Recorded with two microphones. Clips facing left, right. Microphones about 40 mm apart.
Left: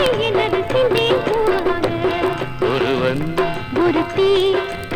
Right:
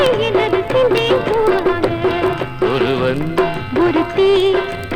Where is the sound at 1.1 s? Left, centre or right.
Centre.